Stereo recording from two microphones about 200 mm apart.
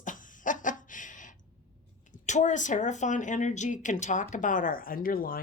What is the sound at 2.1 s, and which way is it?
A woman's voice, 35° left (ahead or behind).